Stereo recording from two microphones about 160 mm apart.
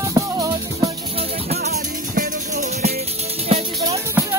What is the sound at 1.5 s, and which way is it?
Music, 75° right (ahead or behind).